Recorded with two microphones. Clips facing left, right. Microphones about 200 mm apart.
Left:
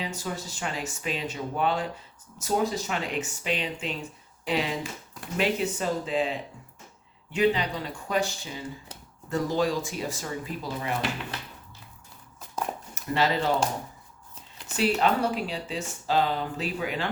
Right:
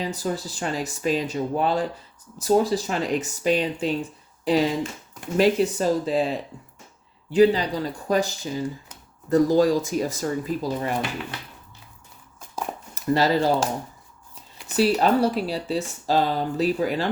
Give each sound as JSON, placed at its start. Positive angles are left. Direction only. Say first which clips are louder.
{"t": 0.0, "sound": "speech", "louder": "right 6 dB", "side_deg": -35}
{"t": 12.9, "sound": "speech", "louder": "right 6 dB", "side_deg": -40}
{"t": 14.8, "sound": "speech", "louder": "right 5 dB", "side_deg": -35}